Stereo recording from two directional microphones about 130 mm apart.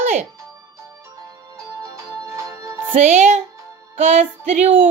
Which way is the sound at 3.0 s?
60° right (ahead or behind).